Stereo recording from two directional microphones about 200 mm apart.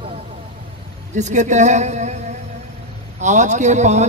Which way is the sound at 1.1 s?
35° right (ahead or behind).